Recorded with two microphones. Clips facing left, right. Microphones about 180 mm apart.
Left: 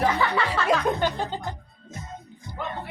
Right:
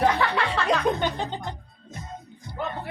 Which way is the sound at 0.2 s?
Centre (ahead or behind).